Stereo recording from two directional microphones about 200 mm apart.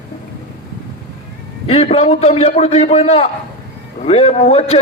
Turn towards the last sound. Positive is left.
turn(degrees=30)  # may be behind; listen again after turning